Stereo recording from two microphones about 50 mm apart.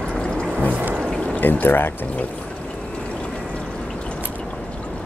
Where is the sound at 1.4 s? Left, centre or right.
Left.